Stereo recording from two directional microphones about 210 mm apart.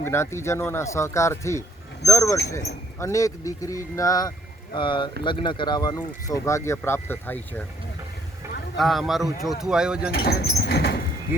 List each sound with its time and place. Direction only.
0.0 s speech: 10° left (ahead or behind)
8.8 s speech: centre (ahead or behind)
10.1 s speech: 50° left (ahead or behind)
11.3 s speech: 10° right (ahead or behind)